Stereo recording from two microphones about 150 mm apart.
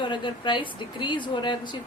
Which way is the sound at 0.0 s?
30° left (ahead or behind).